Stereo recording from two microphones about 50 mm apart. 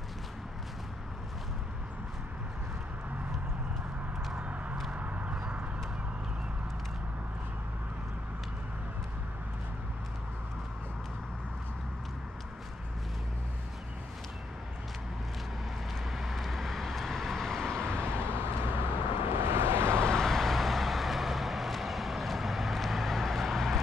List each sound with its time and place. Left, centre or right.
4.3 s vehicle: right
4.9 s a sound: right
5.3 s a sound: centre
16.1 s vehicle: centre
18.7 s vehicle: right
19.9 s vehicle: centre